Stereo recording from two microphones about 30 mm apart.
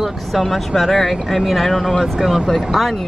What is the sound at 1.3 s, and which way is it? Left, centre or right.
Speech, centre.